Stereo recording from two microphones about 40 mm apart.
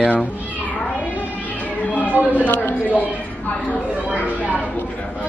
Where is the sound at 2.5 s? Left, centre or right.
Left.